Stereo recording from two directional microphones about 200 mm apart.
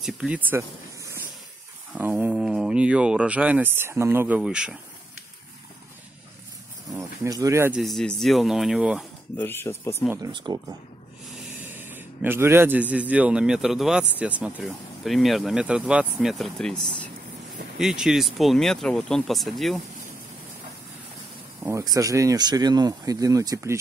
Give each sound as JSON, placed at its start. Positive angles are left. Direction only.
{"t": 0.0, "sound": "speech", "side_deg": -5}
{"t": 6.9, "sound": "speech", "side_deg": -15}
{"t": 7.8, "sound": "speech", "side_deg": 0}
{"t": 9.4, "sound": "speech", "side_deg": 10}
{"t": 10.0, "sound": "speech", "side_deg": -15}
{"t": 11.6, "sound": "a man's voice", "side_deg": -10}
{"t": 17.7, "sound": "speech", "side_deg": -5}
{"t": 21.6, "sound": "speech", "side_deg": -15}